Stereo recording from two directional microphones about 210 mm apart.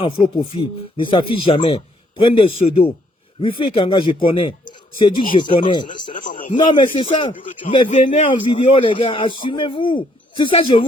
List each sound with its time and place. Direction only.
0.0 s speech: 25° left (ahead or behind)
6.1 s a man's voice: 40° left (ahead or behind)
6.5 s speech: 20° left (ahead or behind)